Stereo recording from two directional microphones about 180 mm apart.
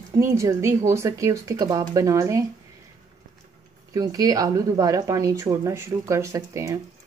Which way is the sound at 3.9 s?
20° right (ahead or behind).